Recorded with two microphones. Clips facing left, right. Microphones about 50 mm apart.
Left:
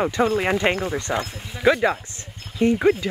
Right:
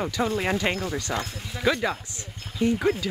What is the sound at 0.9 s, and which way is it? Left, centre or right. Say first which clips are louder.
Speech: left 4 dB; left.